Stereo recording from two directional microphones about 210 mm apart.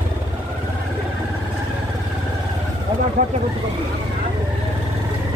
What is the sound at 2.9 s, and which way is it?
Vehicle, 20° right (ahead or behind).